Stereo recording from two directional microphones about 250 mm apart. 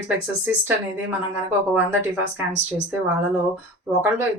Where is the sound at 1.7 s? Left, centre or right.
Centre.